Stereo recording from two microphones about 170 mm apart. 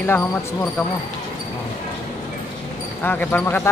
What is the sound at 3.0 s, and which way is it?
Speech, 10° left (ahead or behind).